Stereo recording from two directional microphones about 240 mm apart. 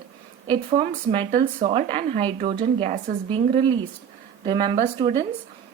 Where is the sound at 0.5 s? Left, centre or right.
Right.